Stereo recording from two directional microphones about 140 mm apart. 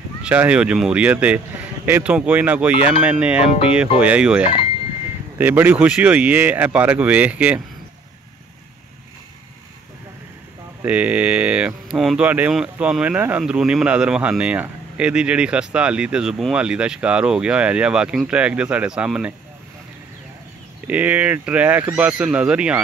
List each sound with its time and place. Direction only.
0.2 s speech: 10° right (ahead or behind)
3.3 s speech: 45° left (ahead or behind)
4.0 s speech: 5° right (ahead or behind)
10.8 s speech: 10° right (ahead or behind)
20.8 s speech: 10° right (ahead or behind)